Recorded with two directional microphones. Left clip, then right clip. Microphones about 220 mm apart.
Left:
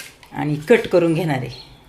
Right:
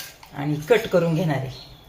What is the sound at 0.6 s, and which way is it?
Speech, 50° left (ahead or behind).